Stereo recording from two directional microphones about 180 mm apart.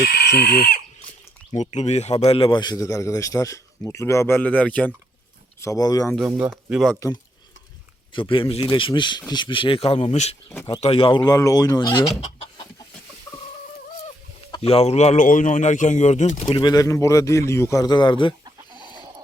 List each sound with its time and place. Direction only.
0.0 s speech: 70° left (ahead or behind)
1.5 s a man's voice: 40° left (ahead or behind); by 4.9 s 5° left (ahead or behind)
5.5 s a man's voice: 20° left (ahead or behind)
6.1 s speech: 5° right (ahead or behind)
8.1 s a man's voice: 30° left (ahead or behind)
10.5 s a man's voice: 15° left (ahead or behind)
10.8 s a man's voice: 30° left (ahead or behind)
14.5 s speech: 30° left (ahead or behind)
16.5 s a man's voice: 25° left (ahead or behind)
18.4 s chicken: 25° right (ahead or behind)